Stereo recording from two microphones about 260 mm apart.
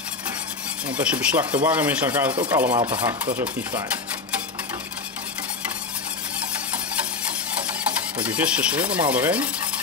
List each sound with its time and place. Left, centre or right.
0.8 s speech: centre
8.2 s rub: centre